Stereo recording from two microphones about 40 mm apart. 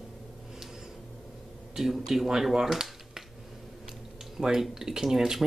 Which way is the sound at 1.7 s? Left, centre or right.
Centre.